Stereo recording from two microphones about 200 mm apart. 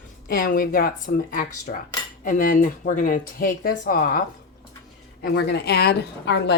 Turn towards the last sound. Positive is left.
turn(degrees=60)  # may be behind; listen again after turning